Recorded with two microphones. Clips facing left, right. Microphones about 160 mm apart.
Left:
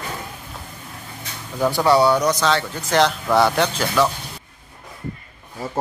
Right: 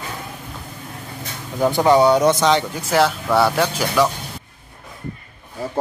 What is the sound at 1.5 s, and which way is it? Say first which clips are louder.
Speech: right 2 dB; 20° right (ahead or behind).